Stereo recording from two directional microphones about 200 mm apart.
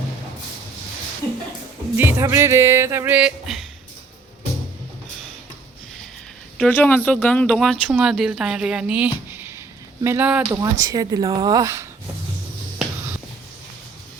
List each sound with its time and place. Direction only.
2.0 s speech: 10° right (ahead or behind)
6.6 s speech: 5° left (ahead or behind); by 11.9 s 15° right (ahead or behind)